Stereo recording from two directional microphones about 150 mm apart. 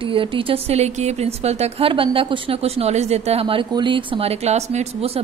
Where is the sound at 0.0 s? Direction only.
35° right (ahead or behind).